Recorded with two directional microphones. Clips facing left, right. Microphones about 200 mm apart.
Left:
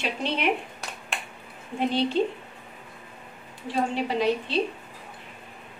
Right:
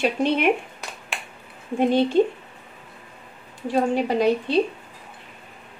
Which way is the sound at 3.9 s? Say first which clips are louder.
Right 3 dB; 50° right (ahead or behind).